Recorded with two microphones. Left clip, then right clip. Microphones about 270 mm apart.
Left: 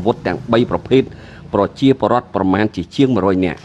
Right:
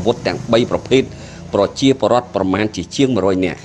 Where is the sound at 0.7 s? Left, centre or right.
Left.